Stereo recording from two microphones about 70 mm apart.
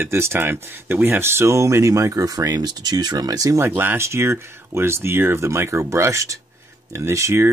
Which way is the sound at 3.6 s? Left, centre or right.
Right.